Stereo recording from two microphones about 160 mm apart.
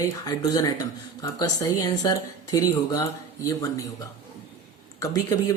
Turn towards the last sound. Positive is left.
turn(degrees=20)  # may be behind; listen again after turning